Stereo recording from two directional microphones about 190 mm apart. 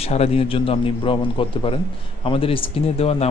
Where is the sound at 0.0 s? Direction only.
35° left (ahead or behind).